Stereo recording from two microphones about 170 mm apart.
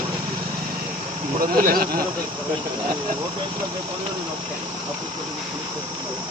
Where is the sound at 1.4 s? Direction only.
60° right (ahead or behind).